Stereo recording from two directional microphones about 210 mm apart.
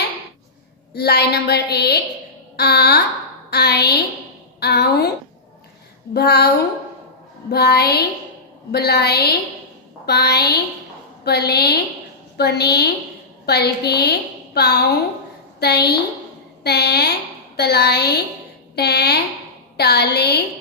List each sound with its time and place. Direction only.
0.9 s a woman's voice: 50° left (ahead or behind)
6.1 s a woman's voice: 50° left (ahead or behind)
7.5 s a woman's voice: 50° left (ahead or behind)